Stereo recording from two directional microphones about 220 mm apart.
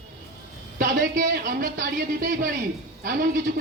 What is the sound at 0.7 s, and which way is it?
Speech, 40° right (ahead or behind).